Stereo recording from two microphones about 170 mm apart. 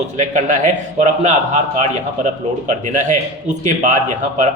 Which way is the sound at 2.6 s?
45° right (ahead or behind).